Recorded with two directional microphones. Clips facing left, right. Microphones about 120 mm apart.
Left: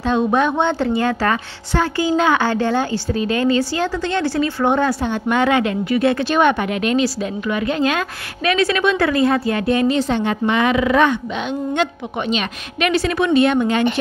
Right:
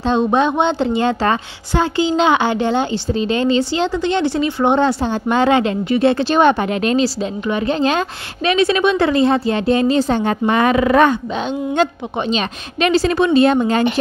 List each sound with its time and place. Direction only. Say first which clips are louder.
0.0 s a woman's voice: right 2 dB; 25° right (ahead or behind)